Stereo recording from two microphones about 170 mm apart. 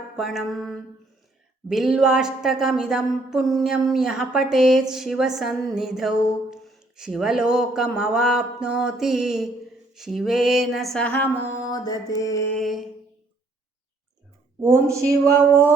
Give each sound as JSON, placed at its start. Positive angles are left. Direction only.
{"t": 0.2, "sound": "a woman's voice", "side_deg": 0}
{"t": 11.7, "sound": "mantra", "side_deg": 20}
{"t": 12.5, "sound": "a woman's voice", "side_deg": 0}
{"t": 14.6, "sound": "a sound", "side_deg": -15}